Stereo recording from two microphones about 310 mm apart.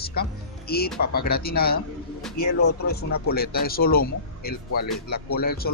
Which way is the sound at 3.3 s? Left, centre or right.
Left.